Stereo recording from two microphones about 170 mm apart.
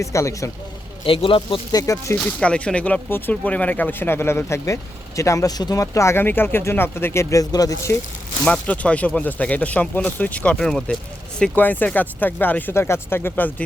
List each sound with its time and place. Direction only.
0.0 s speech: 20° left (ahead or behind)
1.0 s speech: 30° left (ahead or behind)
2.2 s speech: 5° left (ahead or behind)
8.4 s speech: 10° left (ahead or behind)